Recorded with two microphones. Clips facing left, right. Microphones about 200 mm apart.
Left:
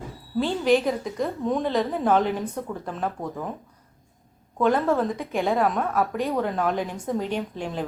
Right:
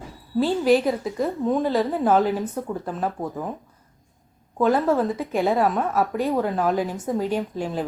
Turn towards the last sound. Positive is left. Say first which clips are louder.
# right 3 dB
turn(degrees=-5)  # may be behind; listen again after turning